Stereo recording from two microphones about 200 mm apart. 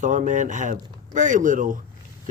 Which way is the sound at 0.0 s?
40° right (ahead or behind).